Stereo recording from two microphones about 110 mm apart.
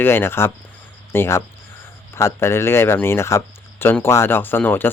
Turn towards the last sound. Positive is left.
turn(degrees=20)  # may be behind; listen again after turning